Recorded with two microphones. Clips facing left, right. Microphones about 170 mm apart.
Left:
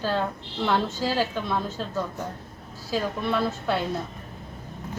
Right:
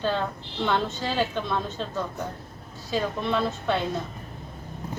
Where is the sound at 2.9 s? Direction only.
5° left (ahead or behind).